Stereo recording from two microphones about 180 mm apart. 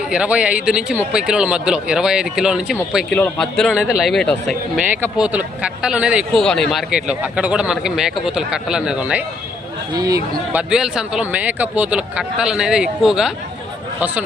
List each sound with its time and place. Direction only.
0.1 s speech: 5° right (ahead or behind)
9.9 s speech: 20° right (ahead or behind)
10.5 s speech: 5° right (ahead or behind)